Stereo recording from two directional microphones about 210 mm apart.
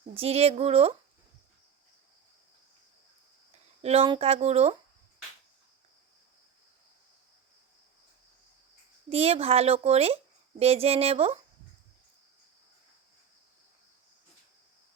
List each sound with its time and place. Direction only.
0.1 s speech: 30° right (ahead or behind)
3.8 s speech: 30° right (ahead or behind)
9.0 s speech: 30° right (ahead or behind)